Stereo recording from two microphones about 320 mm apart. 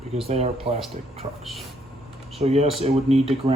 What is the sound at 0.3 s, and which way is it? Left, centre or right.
Speech, centre.